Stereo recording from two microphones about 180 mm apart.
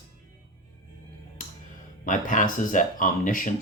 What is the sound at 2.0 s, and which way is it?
Speech, 45° left (ahead or behind).